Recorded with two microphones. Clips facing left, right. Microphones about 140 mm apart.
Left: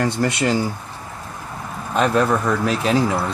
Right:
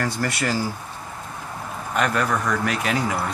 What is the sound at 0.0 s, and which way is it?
Speech, 20° left (ahead or behind).